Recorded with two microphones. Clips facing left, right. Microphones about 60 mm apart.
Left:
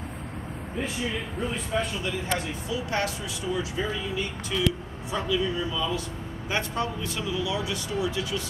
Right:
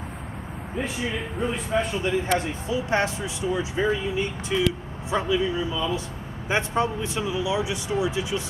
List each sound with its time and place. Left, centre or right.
1.4 s a man's voice: centre
2.0 s speech: right